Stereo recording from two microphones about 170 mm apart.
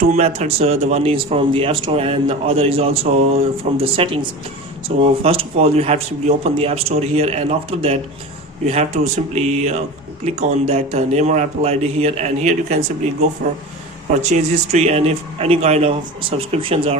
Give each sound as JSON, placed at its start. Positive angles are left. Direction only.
{"t": 0.0, "sound": "speech", "side_deg": -40}
{"t": 14.2, "sound": "speech", "side_deg": -40}